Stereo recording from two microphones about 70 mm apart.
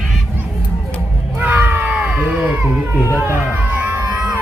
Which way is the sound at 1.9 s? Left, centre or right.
Centre.